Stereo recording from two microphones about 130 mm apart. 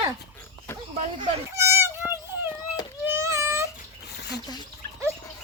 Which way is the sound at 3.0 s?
20° right (ahead or behind).